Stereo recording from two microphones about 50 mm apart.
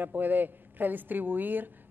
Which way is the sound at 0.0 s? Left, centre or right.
Right.